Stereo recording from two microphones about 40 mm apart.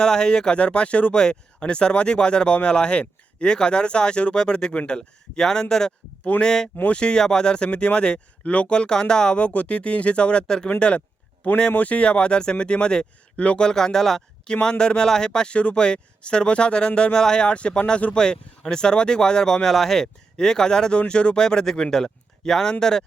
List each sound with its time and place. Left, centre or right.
0.0 s speech: left
1.2 s speech: left
9.4 s speech: left
13.7 s speech: centre
14.5 s speech: left